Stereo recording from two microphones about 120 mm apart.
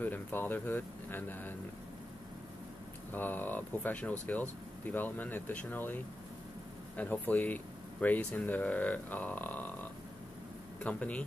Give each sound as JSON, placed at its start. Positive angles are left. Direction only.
{"t": 0.0, "sound": "speech", "side_deg": 15}
{"t": 3.1, "sound": "speech", "side_deg": 15}
{"t": 7.0, "sound": "speech", "side_deg": 15}